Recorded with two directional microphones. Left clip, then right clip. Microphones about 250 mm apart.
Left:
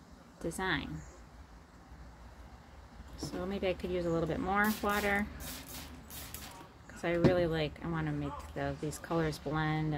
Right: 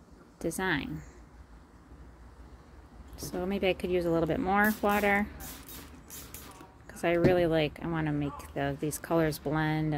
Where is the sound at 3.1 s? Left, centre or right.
Right.